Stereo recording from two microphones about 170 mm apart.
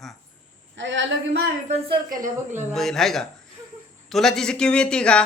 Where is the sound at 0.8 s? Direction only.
90° right.